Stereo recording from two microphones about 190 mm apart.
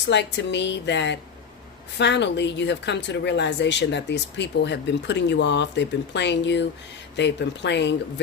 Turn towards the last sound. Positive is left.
turn(degrees=65)  # may be behind; listen again after turning